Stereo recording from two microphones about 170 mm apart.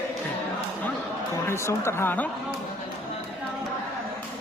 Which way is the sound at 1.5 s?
15° left (ahead or behind).